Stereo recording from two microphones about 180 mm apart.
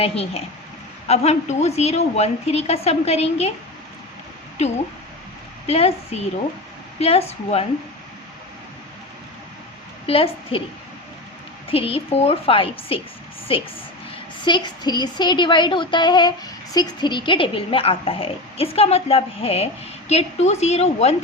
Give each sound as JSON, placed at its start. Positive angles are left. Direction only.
{"t": 0.0, "sound": "a woman's voice", "side_deg": 35}
{"t": 5.6, "sound": "a woman's voice", "side_deg": 35}
{"t": 10.1, "sound": "a woman's voice", "side_deg": 30}
{"t": 11.7, "sound": "a woman's voice", "side_deg": 30}